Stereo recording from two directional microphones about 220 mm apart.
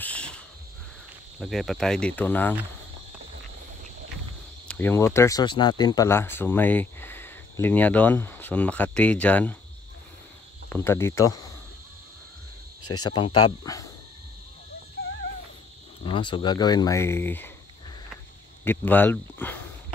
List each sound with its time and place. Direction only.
0.0 s a sound: 5° left (ahead or behind)
1.4 s speech: centre (ahead or behind)
4.6 s speech: 10° left (ahead or behind)
10.7 s speech: 10° left (ahead or behind)
13.0 s speech: 20° left (ahead or behind)
16.0 s speech: 20° left (ahead or behind)
18.1 s a sound: 10° left (ahead or behind)